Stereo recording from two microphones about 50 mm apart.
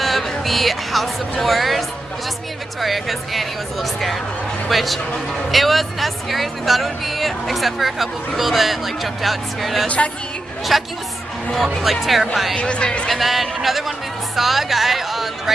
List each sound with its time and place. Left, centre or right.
0.3 s a sound: centre
1.4 s speech: centre
9.8 s speech: left
10.7 s speech: centre
12.5 s speech: centre
13.1 s speech: centre